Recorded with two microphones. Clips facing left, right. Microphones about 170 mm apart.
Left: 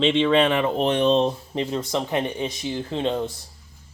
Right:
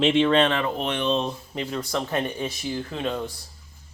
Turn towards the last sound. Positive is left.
turn(degrees=25)  # may be behind; listen again after turning